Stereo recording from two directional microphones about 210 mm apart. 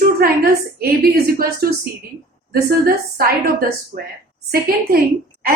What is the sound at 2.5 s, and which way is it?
A woman's voice, 45° right (ahead or behind).